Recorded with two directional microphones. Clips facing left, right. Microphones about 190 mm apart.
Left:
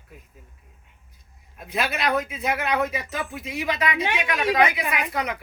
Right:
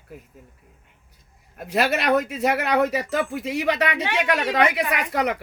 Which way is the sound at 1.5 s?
65° right (ahead or behind).